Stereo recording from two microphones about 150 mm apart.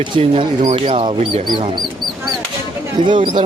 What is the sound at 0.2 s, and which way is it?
Speech, 40° right (ahead or behind).